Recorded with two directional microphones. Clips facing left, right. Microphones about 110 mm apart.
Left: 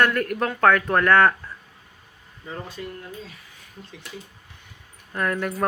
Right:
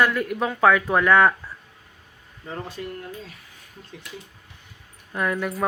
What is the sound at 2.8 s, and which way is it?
Speech, 50° right (ahead or behind).